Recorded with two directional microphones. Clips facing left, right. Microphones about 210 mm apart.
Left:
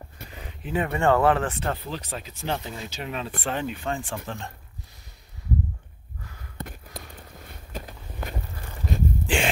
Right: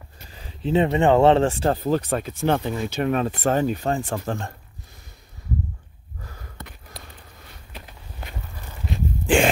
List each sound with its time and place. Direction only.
0.3 s speech: 30° right (ahead or behind)
2.0 s speech: 55° right (ahead or behind)
3.3 s speech: 40° right (ahead or behind)
6.6 s a sound: 50° left (ahead or behind)
7.7 s walk: 45° left (ahead or behind)
9.3 s a sound: 50° right (ahead or behind)